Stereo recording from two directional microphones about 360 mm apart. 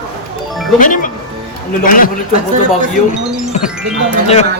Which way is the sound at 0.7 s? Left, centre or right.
Left.